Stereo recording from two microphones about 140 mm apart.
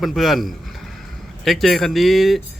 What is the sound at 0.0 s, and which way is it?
Speech, centre (ahead or behind).